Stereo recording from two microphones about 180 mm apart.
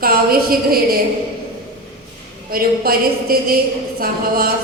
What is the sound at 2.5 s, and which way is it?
Speech, 55° right (ahead or behind).